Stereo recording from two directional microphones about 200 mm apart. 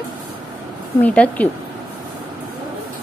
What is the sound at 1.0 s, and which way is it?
Speech, 5° left (ahead or behind).